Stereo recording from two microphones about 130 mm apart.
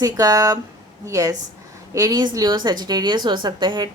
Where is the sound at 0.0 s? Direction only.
30° right (ahead or behind).